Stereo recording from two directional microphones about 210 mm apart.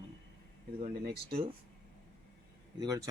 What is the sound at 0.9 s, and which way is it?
Speech, 45° right (ahead or behind).